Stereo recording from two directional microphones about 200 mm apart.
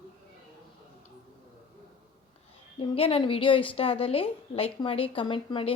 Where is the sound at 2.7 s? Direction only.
30° left (ahead or behind).